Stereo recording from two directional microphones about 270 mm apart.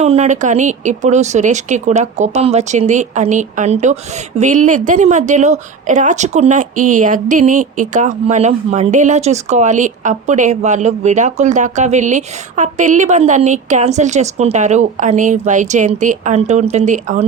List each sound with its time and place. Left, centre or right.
0.0 s a woman's voice: right